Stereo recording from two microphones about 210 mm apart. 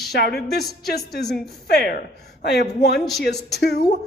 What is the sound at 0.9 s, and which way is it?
A woman's voice, 50° left (ahead or behind).